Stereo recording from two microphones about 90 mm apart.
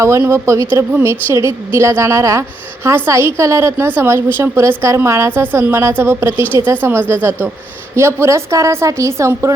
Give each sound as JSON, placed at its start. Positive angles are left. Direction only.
{"t": 0.3, "sound": "a woman's voice", "side_deg": -30}
{"t": 5.3, "sound": "a woman's voice", "side_deg": -20}